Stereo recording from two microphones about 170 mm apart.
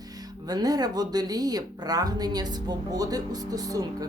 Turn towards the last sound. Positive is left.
turn(degrees=-20)  # may be behind; listen again after turning